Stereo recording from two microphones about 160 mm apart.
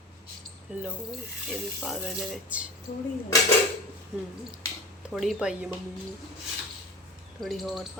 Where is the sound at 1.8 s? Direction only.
Centre (ahead or behind).